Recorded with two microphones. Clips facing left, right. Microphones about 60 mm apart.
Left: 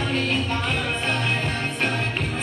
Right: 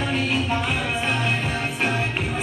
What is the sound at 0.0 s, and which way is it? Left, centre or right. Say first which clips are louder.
Music: right 1 dB; centre.